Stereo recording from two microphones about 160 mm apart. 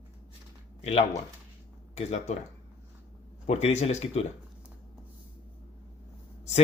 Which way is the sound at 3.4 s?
45° left (ahead or behind).